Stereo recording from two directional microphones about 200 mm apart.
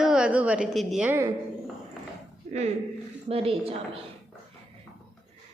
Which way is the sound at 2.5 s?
40° right (ahead or behind).